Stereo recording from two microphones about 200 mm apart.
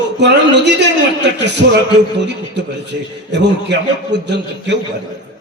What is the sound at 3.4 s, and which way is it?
A man's voice, 60° right (ahead or behind).